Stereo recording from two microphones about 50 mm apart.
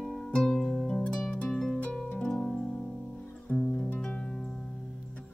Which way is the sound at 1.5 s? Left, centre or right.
Centre.